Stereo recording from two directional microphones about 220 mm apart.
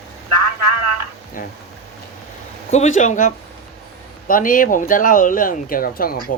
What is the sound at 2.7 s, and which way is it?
Speech, 30° left (ahead or behind).